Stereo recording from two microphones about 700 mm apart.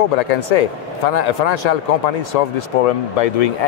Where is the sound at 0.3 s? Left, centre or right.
Left.